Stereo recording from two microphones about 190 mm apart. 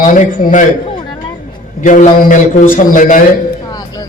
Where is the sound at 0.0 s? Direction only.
45° left (ahead or behind).